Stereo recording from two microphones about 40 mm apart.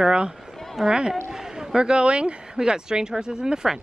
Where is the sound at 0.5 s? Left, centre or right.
Centre.